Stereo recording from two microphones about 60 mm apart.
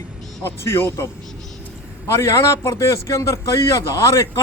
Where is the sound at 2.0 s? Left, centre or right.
Left.